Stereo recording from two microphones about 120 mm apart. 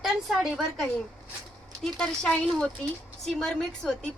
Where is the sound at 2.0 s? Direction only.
5° left (ahead or behind).